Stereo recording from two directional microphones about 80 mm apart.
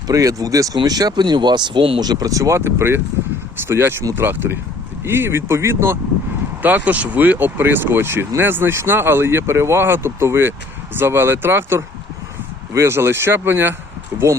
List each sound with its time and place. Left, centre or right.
0.1 s speech: right
6.6 s speech: right